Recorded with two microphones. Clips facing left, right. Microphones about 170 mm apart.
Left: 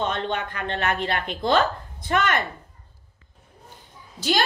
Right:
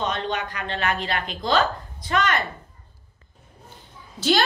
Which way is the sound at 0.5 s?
55° left (ahead or behind).